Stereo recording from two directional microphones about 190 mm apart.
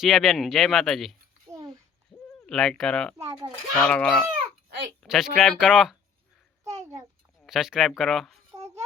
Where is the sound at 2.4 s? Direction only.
5° left (ahead or behind).